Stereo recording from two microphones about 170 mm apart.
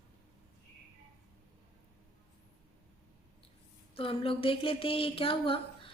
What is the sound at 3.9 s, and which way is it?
Speech, 35° left (ahead or behind).